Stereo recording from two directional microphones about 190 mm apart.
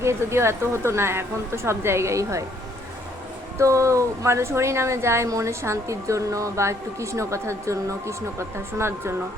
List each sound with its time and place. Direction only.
0.0 s speech: 15° right (ahead or behind)
3.6 s speech: 15° right (ahead or behind)